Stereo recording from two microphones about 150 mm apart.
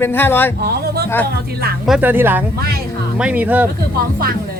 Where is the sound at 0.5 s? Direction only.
90° right.